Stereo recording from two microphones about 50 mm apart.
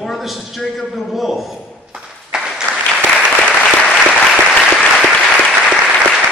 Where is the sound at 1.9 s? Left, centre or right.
Centre.